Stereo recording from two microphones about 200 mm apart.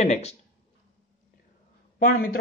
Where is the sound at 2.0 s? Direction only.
45° left (ahead or behind).